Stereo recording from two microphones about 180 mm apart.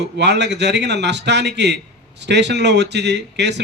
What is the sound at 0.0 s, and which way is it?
Speech, 70° right (ahead or behind).